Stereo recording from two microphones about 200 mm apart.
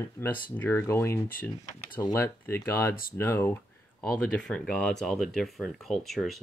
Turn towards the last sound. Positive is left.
turn(degrees=0)  # may be behind; listen again after turning